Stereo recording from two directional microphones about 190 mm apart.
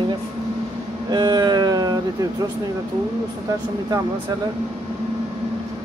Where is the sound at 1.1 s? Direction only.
20° right (ahead or behind).